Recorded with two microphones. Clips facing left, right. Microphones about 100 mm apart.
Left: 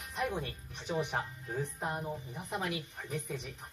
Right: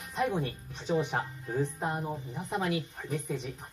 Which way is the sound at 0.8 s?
25° right (ahead or behind).